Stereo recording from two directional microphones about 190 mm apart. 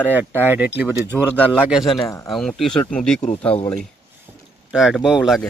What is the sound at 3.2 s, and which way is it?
Speech, 35° left (ahead or behind).